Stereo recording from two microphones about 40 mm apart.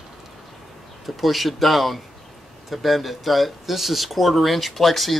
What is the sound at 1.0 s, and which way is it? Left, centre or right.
Speech, centre.